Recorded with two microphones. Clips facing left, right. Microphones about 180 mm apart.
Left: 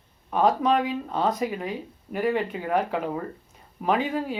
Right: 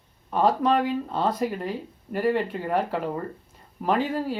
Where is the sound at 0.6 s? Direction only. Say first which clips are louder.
Right 1 dB; 10° left (ahead or behind).